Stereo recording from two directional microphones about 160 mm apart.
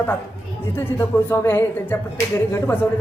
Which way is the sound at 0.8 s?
15° left (ahead or behind).